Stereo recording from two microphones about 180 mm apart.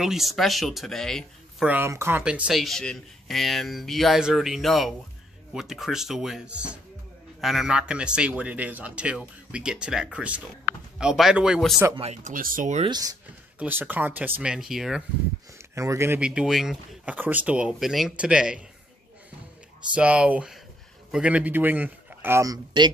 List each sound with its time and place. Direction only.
0.0 s speech: centre (ahead or behind)
1.7 s a man's voice: 15° right (ahead or behind)
11.9 s speech: 35° right (ahead or behind)
12.8 s speech: 20° right (ahead or behind)
13.6 s a man's voice: 10° right (ahead or behind)
15.7 s speech: 15° right (ahead or behind)
19.9 s a man's voice: 5° right (ahead or behind)